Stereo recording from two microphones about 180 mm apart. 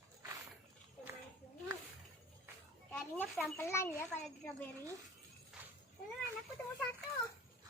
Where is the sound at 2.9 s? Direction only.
Centre (ahead or behind).